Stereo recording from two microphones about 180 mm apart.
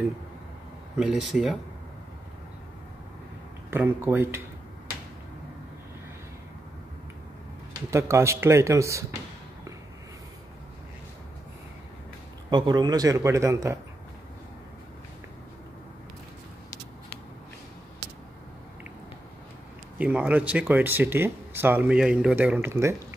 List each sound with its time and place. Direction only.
0.9 s speech: 5° right (ahead or behind)
3.7 s speech: 10° right (ahead or behind)
7.9 s speech: 15° right (ahead or behind)
12.4 s speech: 25° right (ahead or behind)
20.0 s speech: 10° right (ahead or behind)